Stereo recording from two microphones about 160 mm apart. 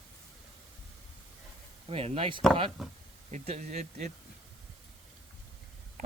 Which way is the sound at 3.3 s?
45° right (ahead or behind).